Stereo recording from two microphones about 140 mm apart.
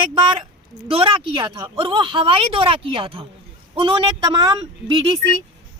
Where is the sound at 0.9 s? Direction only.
40° right (ahead or behind).